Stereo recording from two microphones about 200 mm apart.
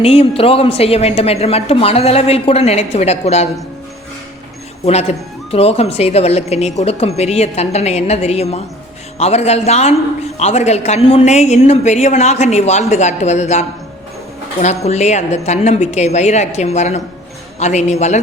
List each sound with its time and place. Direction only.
0.0 s a woman's voice: 30° left (ahead or behind)
4.9 s a woman's voice: 30° left (ahead or behind)